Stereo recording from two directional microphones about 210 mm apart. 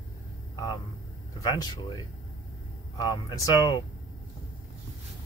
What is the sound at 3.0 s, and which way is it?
Speech, 20° left (ahead or behind).